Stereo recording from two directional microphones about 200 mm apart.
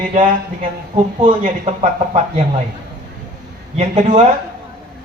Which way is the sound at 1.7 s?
35° right (ahead or behind).